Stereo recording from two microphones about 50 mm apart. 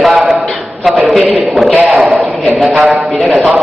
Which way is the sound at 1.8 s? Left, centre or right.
Right.